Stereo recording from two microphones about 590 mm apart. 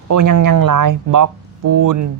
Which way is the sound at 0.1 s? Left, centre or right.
Right.